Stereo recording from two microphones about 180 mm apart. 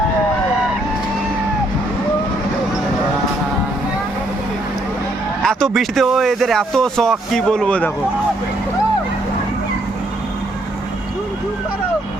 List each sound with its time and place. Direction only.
5.4 s speech: 5° left (ahead or behind)